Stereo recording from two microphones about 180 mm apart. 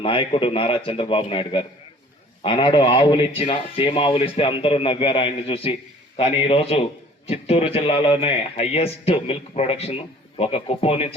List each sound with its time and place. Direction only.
0.0 s a man's voice: 30° left (ahead or behind)